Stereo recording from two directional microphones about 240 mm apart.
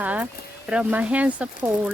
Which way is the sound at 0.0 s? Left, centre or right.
Centre.